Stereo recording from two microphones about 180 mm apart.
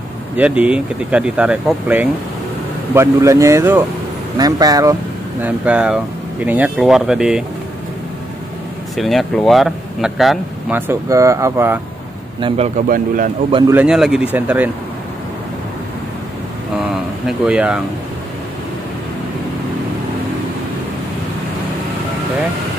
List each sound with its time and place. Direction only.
0.4 s speech: 5° right (ahead or behind)
5.4 s speech: 5° right (ahead or behind)
8.9 s speech: centre (ahead or behind)
10.9 s speech: 15° right (ahead or behind)
12.4 s a man's voice: 30° right (ahead or behind)
12.8 s speech: 50° right (ahead or behind)
13.7 s speech: 5° right (ahead or behind)
17.3 s speech: 5° right (ahead or behind)